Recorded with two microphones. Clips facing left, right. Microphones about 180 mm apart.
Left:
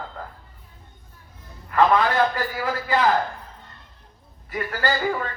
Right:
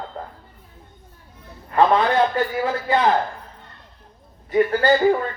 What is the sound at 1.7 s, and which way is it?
A man's voice, 25° right (ahead or behind).